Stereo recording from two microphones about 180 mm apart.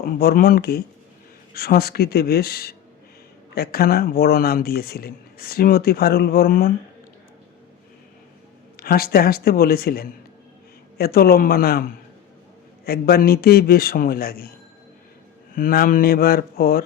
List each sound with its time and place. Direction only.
0.0 s speech: 60° left (ahead or behind)
8.7 s speech: 55° left (ahead or behind)
15.5 s speech: 50° left (ahead or behind)